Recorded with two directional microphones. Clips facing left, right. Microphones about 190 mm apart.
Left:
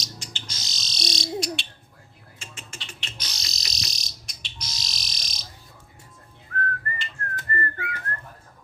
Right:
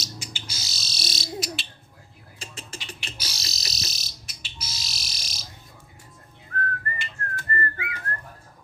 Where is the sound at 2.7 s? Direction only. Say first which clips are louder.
Right 3 dB; 10° right (ahead or behind).